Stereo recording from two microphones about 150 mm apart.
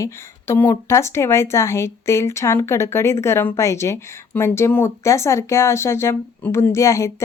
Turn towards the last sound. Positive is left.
turn(degrees=20)  # may be behind; listen again after turning